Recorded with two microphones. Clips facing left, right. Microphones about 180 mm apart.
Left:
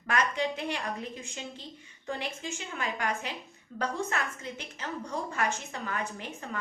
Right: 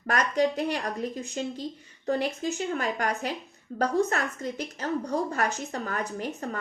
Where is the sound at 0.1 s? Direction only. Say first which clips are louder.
Right 5 dB; 40° right (ahead or behind).